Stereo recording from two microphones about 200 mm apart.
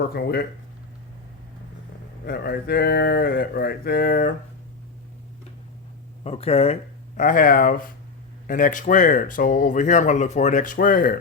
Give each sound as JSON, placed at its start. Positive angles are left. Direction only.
{"t": 0.1, "sound": "speech", "side_deg": 50}
{"t": 2.2, "sound": "speech", "side_deg": 50}
{"t": 6.2, "sound": "speech", "side_deg": 30}
{"t": 7.2, "sound": "speech", "side_deg": 45}